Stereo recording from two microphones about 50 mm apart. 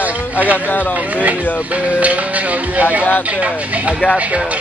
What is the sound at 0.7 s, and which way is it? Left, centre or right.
Speech, left.